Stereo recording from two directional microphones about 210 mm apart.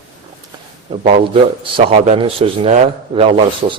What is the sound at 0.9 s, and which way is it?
Speech, 25° right (ahead or behind).